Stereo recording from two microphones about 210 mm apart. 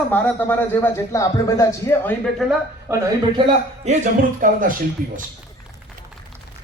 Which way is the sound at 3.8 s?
35° right (ahead or behind).